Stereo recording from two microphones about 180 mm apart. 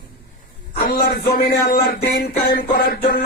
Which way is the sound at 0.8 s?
55° left (ahead or behind).